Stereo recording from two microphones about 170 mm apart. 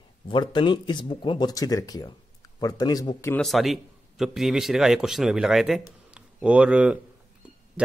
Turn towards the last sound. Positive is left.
turn(degrees=-5)  # may be behind; listen again after turning